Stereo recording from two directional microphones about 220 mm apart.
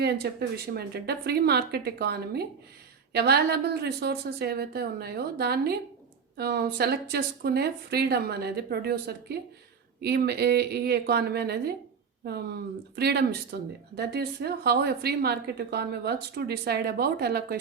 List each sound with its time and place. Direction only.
0.0 s speech: 45° right (ahead or behind)